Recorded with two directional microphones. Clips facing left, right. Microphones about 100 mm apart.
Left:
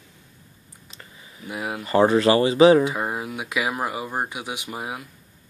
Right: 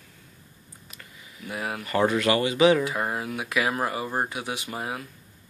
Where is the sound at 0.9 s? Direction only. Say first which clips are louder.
Left 3 dB; 25° left (ahead or behind).